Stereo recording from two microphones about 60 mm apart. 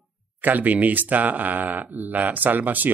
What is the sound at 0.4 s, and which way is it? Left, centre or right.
A man's voice, right.